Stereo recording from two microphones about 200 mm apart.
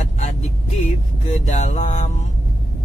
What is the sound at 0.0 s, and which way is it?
Vehicle, 35° left (ahead or behind).